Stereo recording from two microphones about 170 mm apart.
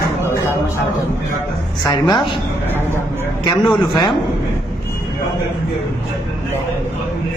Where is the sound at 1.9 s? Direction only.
25° left (ahead or behind).